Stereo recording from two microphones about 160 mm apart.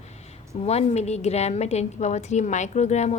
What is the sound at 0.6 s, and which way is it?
A woman's voice, 40° left (ahead or behind).